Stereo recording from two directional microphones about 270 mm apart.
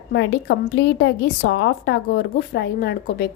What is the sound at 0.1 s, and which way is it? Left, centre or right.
A woman's voice, left.